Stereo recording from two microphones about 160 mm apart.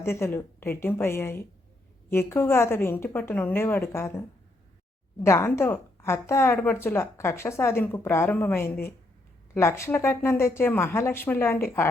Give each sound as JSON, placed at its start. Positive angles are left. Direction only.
{"t": 0.0, "sound": "a woman's voice", "side_deg": 15}
{"t": 5.2, "sound": "a woman's voice", "side_deg": 15}